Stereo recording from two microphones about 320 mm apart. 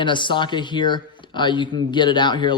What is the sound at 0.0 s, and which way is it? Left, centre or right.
Speech, centre.